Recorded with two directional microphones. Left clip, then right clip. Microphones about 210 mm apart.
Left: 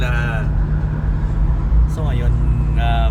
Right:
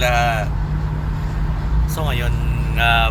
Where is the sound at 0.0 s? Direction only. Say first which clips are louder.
Right 7 dB; 25° right (ahead or behind).